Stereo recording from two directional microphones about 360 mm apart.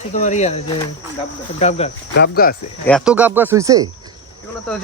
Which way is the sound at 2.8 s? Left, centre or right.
Centre.